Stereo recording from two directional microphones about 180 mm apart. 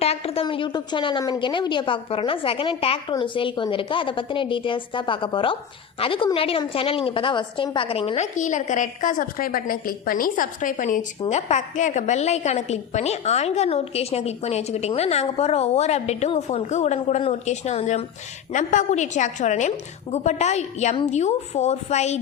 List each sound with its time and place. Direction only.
0.0 s a woman's voice: 35° left (ahead or behind)